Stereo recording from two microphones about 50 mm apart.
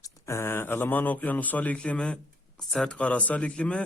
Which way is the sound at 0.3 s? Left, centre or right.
Left.